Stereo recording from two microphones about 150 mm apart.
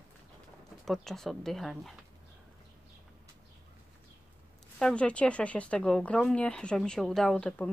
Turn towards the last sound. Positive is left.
turn(degrees=10)  # may be behind; listen again after turning